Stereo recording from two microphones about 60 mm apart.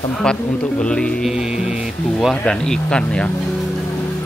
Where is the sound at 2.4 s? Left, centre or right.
Centre.